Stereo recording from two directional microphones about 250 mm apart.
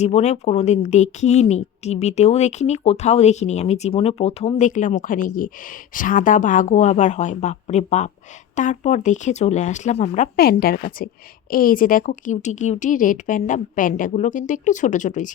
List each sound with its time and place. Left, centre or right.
0.0 s a woman's voice: left